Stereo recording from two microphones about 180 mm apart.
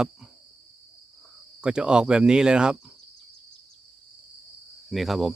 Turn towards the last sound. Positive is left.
turn(degrees=0)  # may be behind; listen again after turning